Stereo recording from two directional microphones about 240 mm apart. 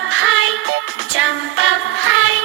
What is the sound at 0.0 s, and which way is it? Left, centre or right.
Music, right.